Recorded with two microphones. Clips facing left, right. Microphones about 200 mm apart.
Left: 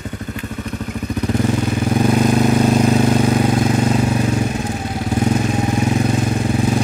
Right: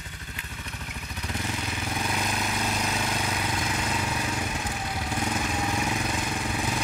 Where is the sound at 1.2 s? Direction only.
55° left (ahead or behind).